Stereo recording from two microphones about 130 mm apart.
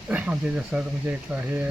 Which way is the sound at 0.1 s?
10° right (ahead or behind).